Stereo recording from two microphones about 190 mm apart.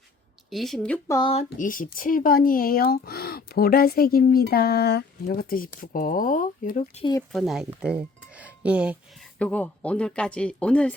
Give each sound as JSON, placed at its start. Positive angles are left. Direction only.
{"t": 0.5, "sound": "speech", "side_deg": 0}
{"t": 1.0, "sound": "speech", "side_deg": 15}
{"t": 1.5, "sound": "speech", "side_deg": 45}
{"t": 5.2, "sound": "speech", "side_deg": 50}
{"t": 7.0, "sound": "speech", "side_deg": 20}
{"t": 7.3, "sound": "speech", "side_deg": 0}
{"t": 9.4, "sound": "speech", "side_deg": 5}